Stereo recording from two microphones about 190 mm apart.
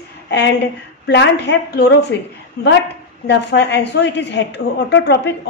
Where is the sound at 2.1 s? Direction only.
70° left (ahead or behind).